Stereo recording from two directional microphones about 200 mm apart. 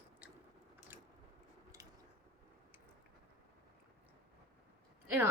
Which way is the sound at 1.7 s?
15° right (ahead or behind).